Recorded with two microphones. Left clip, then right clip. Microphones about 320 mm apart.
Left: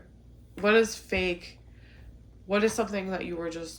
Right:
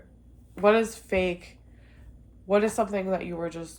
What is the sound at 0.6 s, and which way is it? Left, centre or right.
Speech, centre.